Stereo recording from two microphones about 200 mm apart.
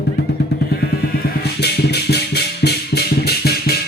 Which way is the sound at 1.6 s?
55° left (ahead or behind).